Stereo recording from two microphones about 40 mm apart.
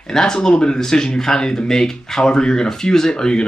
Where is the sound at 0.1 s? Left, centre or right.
Centre.